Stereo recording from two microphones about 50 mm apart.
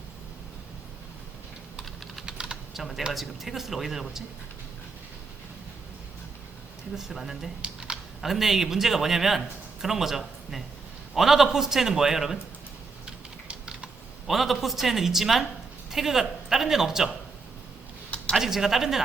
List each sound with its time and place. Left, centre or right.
2.2 s typing: centre
2.7 s speech: centre
6.9 s speech: centre
7.6 s typing: centre
8.2 s a man's voice: centre
13.1 s typing: centre
14.3 s speech: centre
18.3 s a man's voice: centre